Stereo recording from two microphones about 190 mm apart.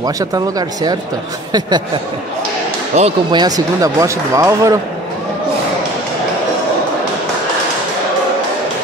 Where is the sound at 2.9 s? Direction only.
35° right (ahead or behind).